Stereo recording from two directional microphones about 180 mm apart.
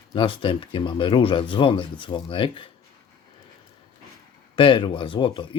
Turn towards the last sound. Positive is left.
turn(degrees=30)  # may be behind; listen again after turning